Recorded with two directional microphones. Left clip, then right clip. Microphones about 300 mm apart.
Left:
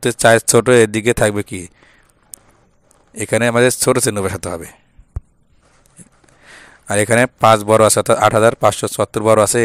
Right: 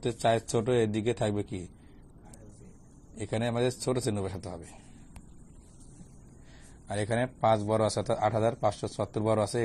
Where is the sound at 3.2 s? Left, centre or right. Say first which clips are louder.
Left 17 dB; left.